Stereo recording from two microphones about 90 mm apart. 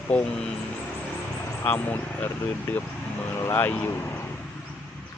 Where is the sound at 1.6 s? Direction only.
25° left (ahead or behind).